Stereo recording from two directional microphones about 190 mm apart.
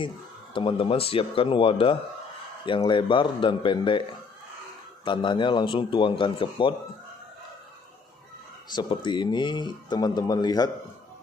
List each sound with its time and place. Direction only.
0.6 s speech: 25° left (ahead or behind)
5.0 s speech: 25° left (ahead or behind)
8.7 s speech: 25° left (ahead or behind)